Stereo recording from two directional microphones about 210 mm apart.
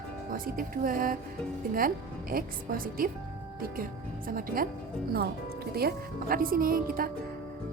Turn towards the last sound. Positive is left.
turn(degrees=-45)  # may be behind; listen again after turning